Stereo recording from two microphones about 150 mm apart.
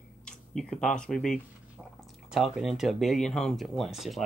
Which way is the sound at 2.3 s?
5° right (ahead or behind).